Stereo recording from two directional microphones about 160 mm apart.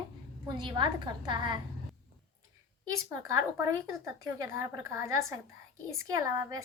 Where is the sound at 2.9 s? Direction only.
20° right (ahead or behind).